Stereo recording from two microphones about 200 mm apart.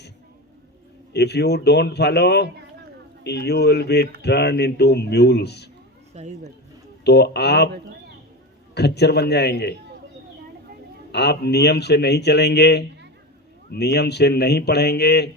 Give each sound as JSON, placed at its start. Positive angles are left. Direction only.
{"t": 1.1, "sound": "speech", "side_deg": 55}
{"t": 6.1, "sound": "speech", "side_deg": -35}
{"t": 7.0, "sound": "speech", "side_deg": 55}
{"t": 8.7, "sound": "speech", "side_deg": 55}
{"t": 11.1, "sound": "speech", "side_deg": 55}